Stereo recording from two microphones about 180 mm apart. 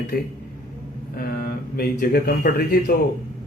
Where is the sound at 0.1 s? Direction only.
55° left (ahead or behind).